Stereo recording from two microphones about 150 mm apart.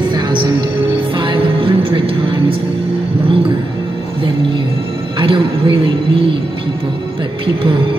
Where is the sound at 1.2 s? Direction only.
35° right (ahead or behind).